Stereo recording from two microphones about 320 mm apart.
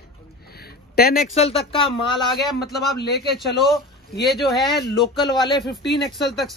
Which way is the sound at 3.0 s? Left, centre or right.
Left.